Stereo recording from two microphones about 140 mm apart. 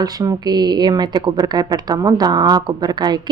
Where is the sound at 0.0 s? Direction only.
25° right (ahead or behind).